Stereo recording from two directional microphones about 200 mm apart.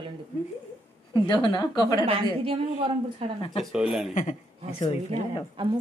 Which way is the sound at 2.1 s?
30° right (ahead or behind).